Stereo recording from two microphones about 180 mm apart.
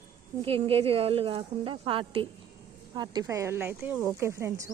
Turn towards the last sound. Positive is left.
turn(degrees=-15)  # may be behind; listen again after turning